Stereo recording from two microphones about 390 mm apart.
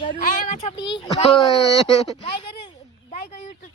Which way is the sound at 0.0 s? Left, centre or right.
Left.